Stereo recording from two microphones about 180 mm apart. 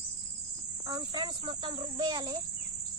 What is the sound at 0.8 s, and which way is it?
Speech, 20° right (ahead or behind).